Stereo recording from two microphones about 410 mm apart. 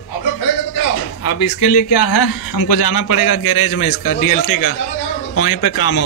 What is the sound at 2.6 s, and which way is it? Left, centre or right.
Speech, left.